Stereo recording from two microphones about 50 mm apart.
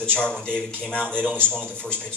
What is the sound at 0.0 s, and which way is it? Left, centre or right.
Speech, left.